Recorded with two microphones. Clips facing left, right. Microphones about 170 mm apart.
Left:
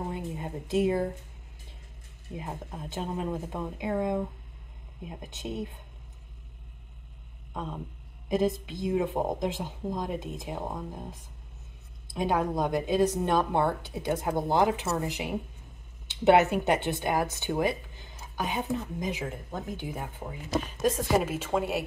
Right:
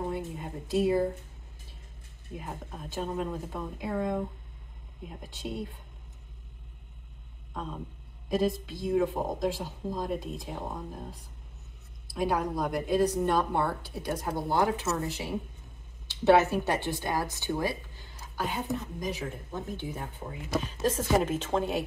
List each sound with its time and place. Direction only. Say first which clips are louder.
0.1 s a sound: even; 20° left (ahead or behind)
2.3 s speech: left 2 dB; 20° left (ahead or behind)
8.3 s a woman's voice: left 1 dB; 20° left (ahead or behind)